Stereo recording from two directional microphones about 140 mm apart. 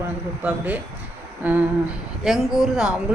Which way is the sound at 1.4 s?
10° right (ahead or behind).